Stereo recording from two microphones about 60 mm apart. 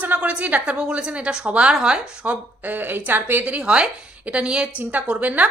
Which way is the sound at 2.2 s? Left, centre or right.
Right.